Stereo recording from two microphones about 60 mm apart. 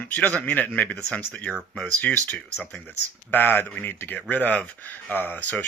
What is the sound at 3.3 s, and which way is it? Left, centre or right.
Speech, left.